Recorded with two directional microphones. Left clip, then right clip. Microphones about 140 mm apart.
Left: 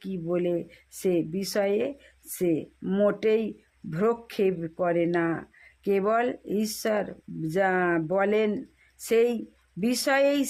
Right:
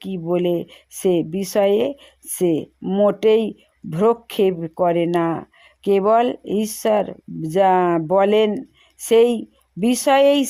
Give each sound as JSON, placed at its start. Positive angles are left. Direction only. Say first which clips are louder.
{"t": 0.3, "sound": "speech", "louder": "right 7 dB", "side_deg": -35}
{"t": 2.8, "sound": "speech", "louder": "right 7 dB", "side_deg": -20}
{"t": 3.2, "sound": "speech", "louder": "right 9 dB", "side_deg": -35}